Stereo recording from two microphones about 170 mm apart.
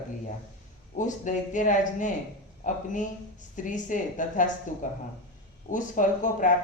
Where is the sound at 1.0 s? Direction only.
45° left (ahead or behind).